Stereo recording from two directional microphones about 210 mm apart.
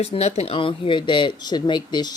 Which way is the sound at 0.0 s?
30° left (ahead or behind).